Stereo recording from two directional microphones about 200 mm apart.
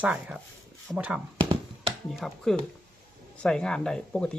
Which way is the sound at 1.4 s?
25° right (ahead or behind).